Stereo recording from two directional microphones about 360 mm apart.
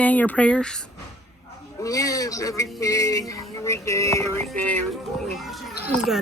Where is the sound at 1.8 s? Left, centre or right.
Centre.